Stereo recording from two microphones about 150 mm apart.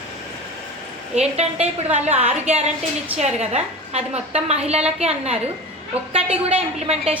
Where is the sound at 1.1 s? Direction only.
45° right (ahead or behind).